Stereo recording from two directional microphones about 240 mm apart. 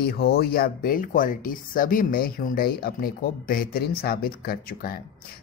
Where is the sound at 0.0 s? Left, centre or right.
Left.